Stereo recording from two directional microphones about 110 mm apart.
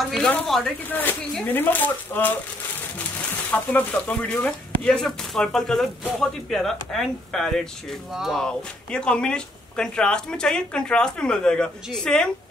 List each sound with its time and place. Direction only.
0.0 s speech: 5° left (ahead or behind)
0.9 s speech: 15° left (ahead or behind)
3.5 s speech: 15° left (ahead or behind); by 8.4 s 5° right (ahead or behind)
8.4 s speech: 5° left (ahead or behind)